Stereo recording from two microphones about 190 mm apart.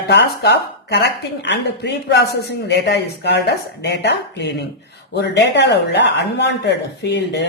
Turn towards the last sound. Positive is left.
turn(degrees=65)  # may be behind; listen again after turning